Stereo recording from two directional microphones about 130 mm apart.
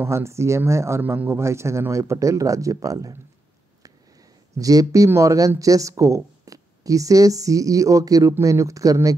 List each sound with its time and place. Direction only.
0.0 s a woman's voice: 20° right (ahead or behind)
4.6 s a woman's voice: 25° right (ahead or behind)